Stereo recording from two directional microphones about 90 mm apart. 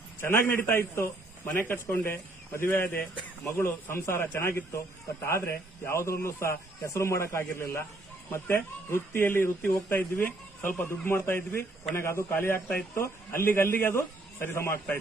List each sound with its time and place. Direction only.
0.2 s a man's voice: 25° left (ahead or behind)